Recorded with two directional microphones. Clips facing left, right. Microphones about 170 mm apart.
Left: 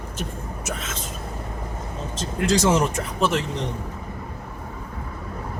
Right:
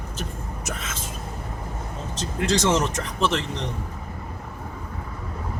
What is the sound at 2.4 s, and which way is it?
Speech, 5° left (ahead or behind).